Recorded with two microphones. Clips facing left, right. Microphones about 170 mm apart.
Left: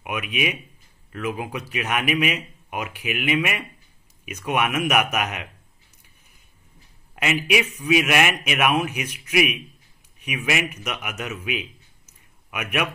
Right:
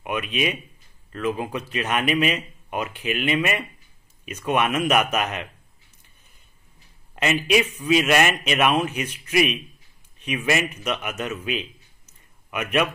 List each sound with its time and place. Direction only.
0.0 s speech: 10° left (ahead or behind)
7.2 s a man's voice: 10° left (ahead or behind)